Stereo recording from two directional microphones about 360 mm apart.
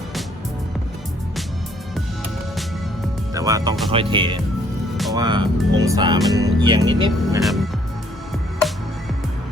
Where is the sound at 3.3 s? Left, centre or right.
Centre.